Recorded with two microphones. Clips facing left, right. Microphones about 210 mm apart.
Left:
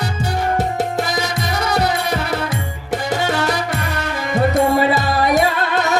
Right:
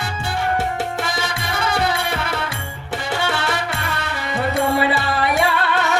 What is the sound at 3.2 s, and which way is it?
Music, 40° left (ahead or behind).